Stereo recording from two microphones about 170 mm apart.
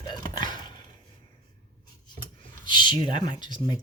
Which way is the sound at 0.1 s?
25° left (ahead or behind).